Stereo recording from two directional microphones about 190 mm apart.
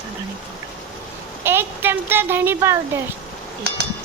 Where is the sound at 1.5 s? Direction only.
10° right (ahead or behind).